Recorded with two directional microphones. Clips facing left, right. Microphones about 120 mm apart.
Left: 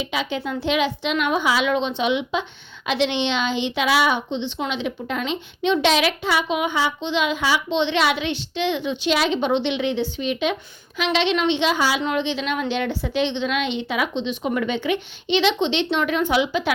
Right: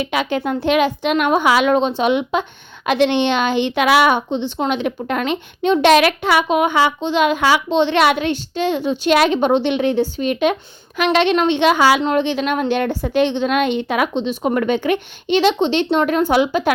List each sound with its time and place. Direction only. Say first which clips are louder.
0.0 s a woman's voice: right 6 dB; 60° right (ahead or behind)
1.7 s a woman's voice: right 5 dB; 45° right (ahead or behind); by 6.4 s 60° right (ahead or behind)
6.5 s a woman's voice: right 7 dB; 50° right (ahead or behind)
7.7 s a woman's voice: right 4 dB; 45° right (ahead or behind)
9.1 s a woman's voice: right 7 dB; 55° right (ahead or behind)
11.8 s a woman's voice: right 8 dB; 70° right (ahead or behind)
12.0 s a woman's voice: right 6 dB; 50° right (ahead or behind)